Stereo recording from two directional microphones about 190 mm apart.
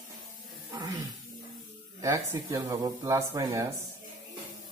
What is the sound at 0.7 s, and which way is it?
Speech, 20° right (ahead or behind).